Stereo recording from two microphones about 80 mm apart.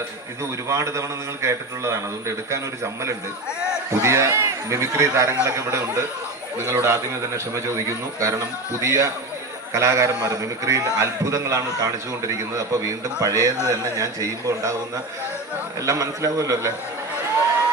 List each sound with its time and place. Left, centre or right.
0.7 s a man's voice: right
15.8 s a man's voice: right